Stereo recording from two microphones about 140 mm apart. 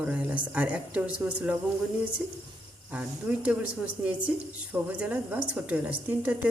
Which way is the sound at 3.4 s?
10° right (ahead or behind).